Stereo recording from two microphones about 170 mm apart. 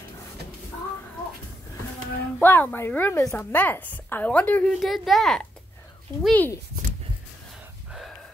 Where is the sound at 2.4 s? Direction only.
10° left (ahead or behind).